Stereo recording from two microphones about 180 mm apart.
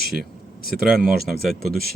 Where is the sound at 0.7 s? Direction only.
Centre (ahead or behind).